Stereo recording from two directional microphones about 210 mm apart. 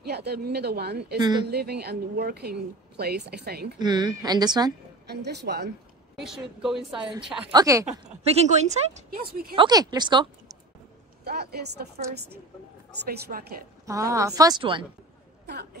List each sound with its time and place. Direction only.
0.0 s a woman's voice: 50° right (ahead or behind)
1.2 s a woman's voice: 20° right (ahead or behind)
1.5 s a woman's voice: 50° right (ahead or behind)
3.8 s a woman's voice: 20° right (ahead or behind)
5.0 s a woman's voice: 50° right (ahead or behind)
6.2 s a woman's voice: centre (ahead or behind)
7.5 s a woman's voice: 15° right (ahead or behind)
8.3 s speech: 30° right (ahead or behind)
9.2 s a woman's voice: 45° right (ahead or behind)
9.6 s a woman's voice: 20° right (ahead or behind)
11.2 s a woman's voice: 50° right (ahead or behind)
13.0 s a woman's voice: 50° right (ahead or behind)
13.8 s a woman's voice: 15° right (ahead or behind)
15.4 s speech: 50° right (ahead or behind)